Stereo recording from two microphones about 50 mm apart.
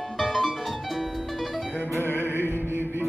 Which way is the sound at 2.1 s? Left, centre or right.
Right.